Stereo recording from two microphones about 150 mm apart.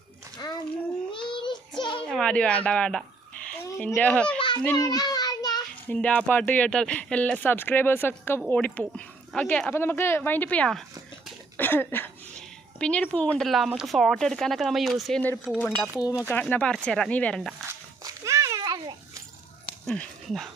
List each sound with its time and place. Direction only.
0.4 s a sound: 25° left (ahead or behind)
1.1 s child singing: 35° left (ahead or behind)
2.0 s speech: 5° left (ahead or behind)
4.4 s children playing: 35° left (ahead or behind)
4.8 s child singing: 25° left (ahead or behind)
5.9 s speech: 10° left (ahead or behind)
16.2 s speech: 10° left (ahead or behind)
18.0 s a sound: 20° right (ahead or behind)
19.9 s speech: centre (ahead or behind)